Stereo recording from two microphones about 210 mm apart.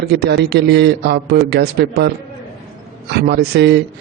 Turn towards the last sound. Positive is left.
turn(degrees=-50)  # may be behind; listen again after turning